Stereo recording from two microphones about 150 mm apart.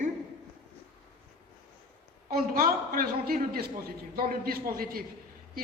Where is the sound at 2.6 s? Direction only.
75° right (ahead or behind).